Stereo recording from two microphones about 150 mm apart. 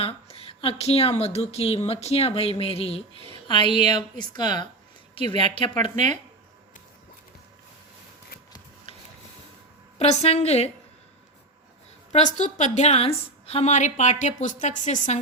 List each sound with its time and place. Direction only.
0.0 s a woman's voice: 40° left (ahead or behind)
5.8 s speech: 50° right (ahead or behind)
10.0 s a woman's voice: 45° left (ahead or behind)
12.1 s a woman's voice: 55° left (ahead or behind)